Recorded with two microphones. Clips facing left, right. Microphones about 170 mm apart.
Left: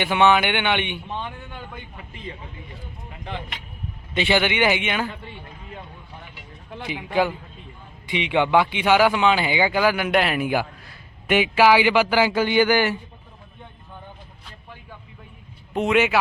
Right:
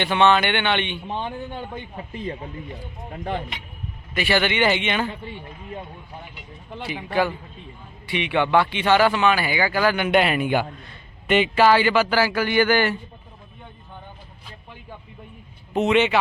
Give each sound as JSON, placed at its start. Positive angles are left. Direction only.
{"t": 0.0, "sound": "a man's voice", "side_deg": 10}
{"t": 1.0, "sound": "speech", "side_deg": -30}
{"t": 4.1, "sound": "a man's voice", "side_deg": 20}
{"t": 6.8, "sound": "a man's voice", "side_deg": 15}
{"t": 15.7, "sound": "speech", "side_deg": 0}